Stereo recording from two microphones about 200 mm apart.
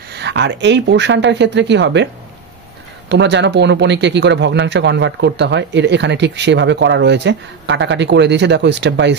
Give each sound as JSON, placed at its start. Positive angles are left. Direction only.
{"t": 0.1, "sound": "speech", "side_deg": -60}
{"t": 3.1, "sound": "speech", "side_deg": -60}